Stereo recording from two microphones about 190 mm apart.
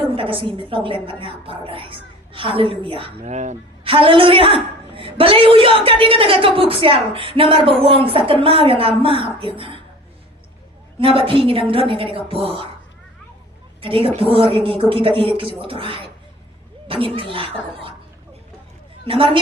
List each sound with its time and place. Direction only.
0.1 s a woman's voice: 30° right (ahead or behind)
11.0 s a woman's voice: 30° right (ahead or behind)
13.8 s a woman's voice: 30° right (ahead or behind)
19.0 s a woman's voice: 30° right (ahead or behind)